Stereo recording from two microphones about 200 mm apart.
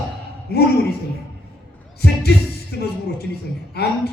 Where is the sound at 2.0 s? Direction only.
55° left (ahead or behind).